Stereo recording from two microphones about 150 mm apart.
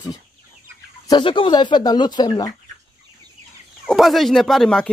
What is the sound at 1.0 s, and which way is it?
Speech, 30° left (ahead or behind).